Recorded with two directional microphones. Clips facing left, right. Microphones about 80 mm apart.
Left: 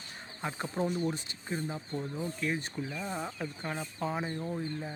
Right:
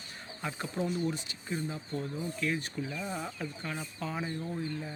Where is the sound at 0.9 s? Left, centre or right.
Left.